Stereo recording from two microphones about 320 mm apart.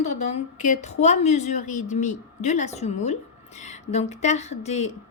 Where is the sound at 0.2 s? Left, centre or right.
Left.